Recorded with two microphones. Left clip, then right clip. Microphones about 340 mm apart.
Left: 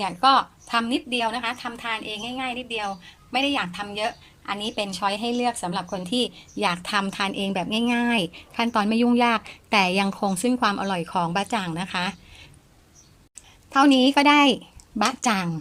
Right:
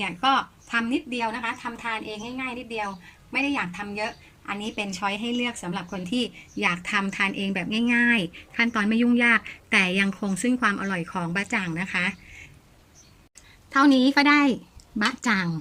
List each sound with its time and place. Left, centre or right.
0.0 s a woman's voice: centre
13.7 s a woman's voice: centre